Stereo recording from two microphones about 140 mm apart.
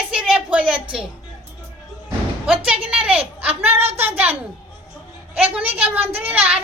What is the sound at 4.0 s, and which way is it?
Speech, 10° right (ahead or behind).